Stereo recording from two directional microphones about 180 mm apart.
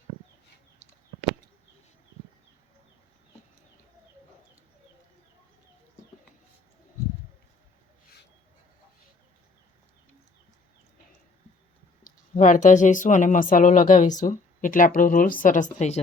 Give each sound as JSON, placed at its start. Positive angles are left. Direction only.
{"t": 12.3, "sound": "speech", "side_deg": 40}